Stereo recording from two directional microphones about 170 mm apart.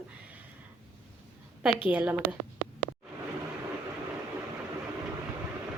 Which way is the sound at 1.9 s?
10° right (ahead or behind).